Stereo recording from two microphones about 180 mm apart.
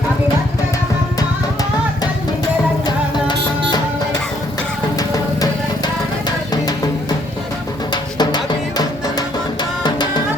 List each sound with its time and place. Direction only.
4.9 s music: 20° left (ahead or behind)
8.2 s music: 25° left (ahead or behind)